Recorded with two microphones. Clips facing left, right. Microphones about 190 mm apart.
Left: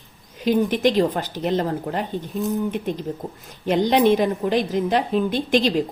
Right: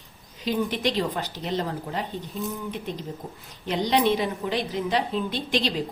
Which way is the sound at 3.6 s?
50° left (ahead or behind).